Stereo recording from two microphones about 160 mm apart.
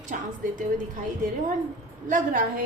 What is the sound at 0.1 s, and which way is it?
Speech, 55° right (ahead or behind).